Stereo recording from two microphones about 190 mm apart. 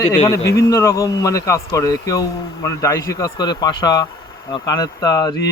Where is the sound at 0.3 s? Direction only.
15° left (ahead or behind).